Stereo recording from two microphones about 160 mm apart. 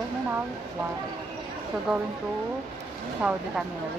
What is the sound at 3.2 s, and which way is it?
Speech, 5° right (ahead or behind).